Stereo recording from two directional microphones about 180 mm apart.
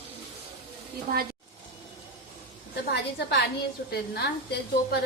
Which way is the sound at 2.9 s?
70° left (ahead or behind).